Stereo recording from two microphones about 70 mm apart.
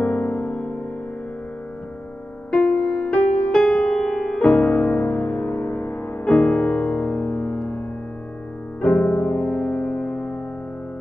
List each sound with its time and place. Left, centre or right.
0.0 s music: centre
2.7 s music: centre
7.2 s music: left
8.8 s music: centre